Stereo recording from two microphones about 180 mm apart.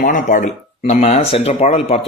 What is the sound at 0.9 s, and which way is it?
Speech, 35° left (ahead or behind).